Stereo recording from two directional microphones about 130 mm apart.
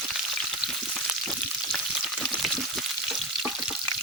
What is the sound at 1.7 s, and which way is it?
Frying, centre (ahead or behind).